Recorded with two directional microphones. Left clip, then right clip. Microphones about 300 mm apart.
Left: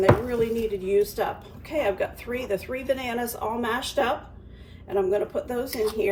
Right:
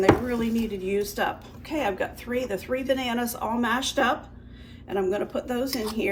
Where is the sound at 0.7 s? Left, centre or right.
Centre.